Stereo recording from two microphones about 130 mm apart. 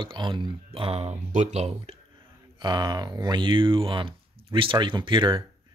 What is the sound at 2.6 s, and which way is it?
Speech, 35° right (ahead or behind).